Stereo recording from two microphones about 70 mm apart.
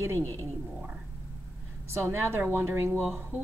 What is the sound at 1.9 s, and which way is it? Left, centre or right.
A woman's voice, right.